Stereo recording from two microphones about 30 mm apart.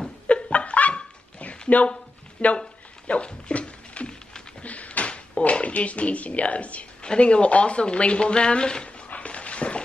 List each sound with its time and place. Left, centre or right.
0.3 s a sound: left
2.4 s speech: left
3.1 s speech: left
3.4 s a sound: left
4.6 s cupboard open or close: left
5.4 s speech: left
7.0 s speech: left
8.8 s dog: left